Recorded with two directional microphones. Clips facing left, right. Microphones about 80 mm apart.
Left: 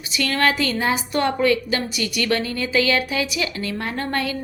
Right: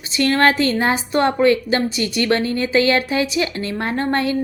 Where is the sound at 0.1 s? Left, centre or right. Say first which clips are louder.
Right 5 dB; right.